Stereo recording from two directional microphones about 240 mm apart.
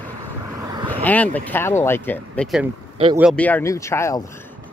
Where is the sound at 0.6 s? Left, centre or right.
Centre.